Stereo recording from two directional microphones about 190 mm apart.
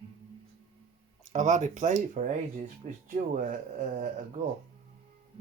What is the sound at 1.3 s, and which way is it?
Speech, 40° right (ahead or behind).